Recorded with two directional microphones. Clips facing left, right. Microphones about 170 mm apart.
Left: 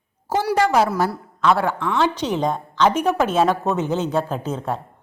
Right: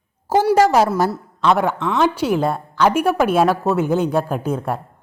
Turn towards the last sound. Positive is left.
turn(degrees=-10)  # may be behind; listen again after turning